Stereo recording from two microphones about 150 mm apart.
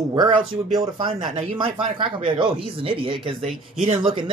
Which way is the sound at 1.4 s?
35° right (ahead or behind).